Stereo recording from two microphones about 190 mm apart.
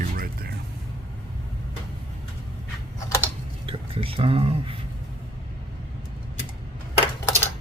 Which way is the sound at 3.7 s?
30° right (ahead or behind).